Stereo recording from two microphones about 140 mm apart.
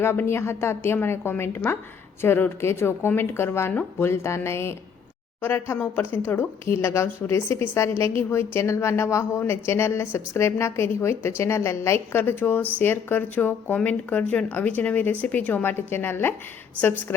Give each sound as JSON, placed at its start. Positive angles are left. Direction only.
{"t": 0.0, "sound": "speech", "side_deg": 15}